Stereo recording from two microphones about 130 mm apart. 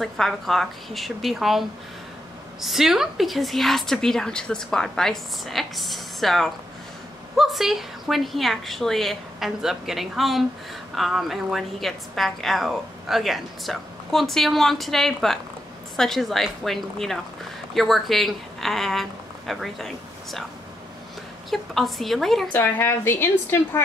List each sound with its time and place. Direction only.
0.0 s a woman's voice: centre (ahead or behind)
21.5 s a woman's voice: centre (ahead or behind)
22.5 s a woman's voice: 15° left (ahead or behind)